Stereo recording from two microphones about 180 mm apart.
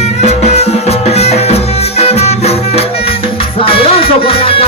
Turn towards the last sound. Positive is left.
turn(degrees=30)  # may be behind; listen again after turning